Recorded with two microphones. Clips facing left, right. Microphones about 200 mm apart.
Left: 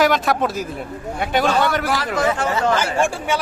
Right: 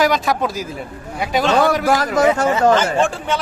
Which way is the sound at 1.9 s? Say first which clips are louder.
Right 5 dB; 45° right (ahead or behind).